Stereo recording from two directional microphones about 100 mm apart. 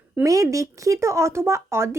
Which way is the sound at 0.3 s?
35° right (ahead or behind).